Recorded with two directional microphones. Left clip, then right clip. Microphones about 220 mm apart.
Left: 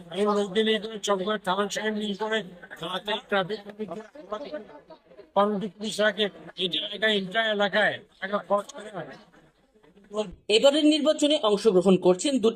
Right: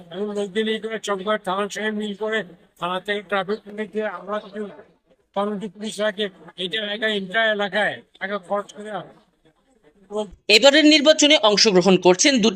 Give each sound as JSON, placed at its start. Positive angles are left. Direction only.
{"t": 0.1, "sound": "speech", "side_deg": 0}
{"t": 10.7, "sound": "speech", "side_deg": -15}